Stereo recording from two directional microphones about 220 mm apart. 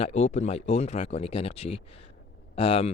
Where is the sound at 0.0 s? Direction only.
30° left (ahead or behind).